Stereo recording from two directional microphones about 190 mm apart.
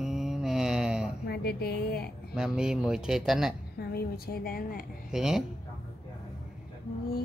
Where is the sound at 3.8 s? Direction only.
55° left (ahead or behind).